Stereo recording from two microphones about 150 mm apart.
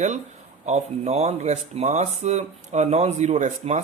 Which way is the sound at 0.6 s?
50° right (ahead or behind).